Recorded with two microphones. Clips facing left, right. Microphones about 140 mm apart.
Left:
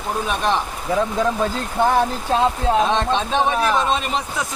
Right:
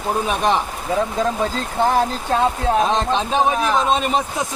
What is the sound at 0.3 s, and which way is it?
Speech, 15° right (ahead or behind).